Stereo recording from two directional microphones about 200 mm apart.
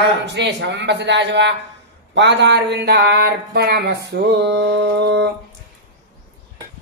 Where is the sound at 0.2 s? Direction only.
60° right (ahead or behind).